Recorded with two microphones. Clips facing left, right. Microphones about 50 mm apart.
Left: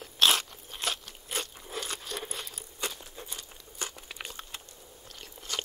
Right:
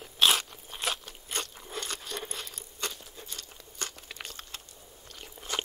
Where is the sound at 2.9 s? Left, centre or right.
Centre.